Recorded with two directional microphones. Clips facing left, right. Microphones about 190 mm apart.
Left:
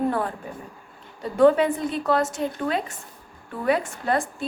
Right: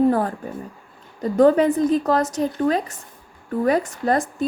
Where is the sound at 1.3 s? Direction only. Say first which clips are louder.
Right 2 dB; 40° right (ahead or behind).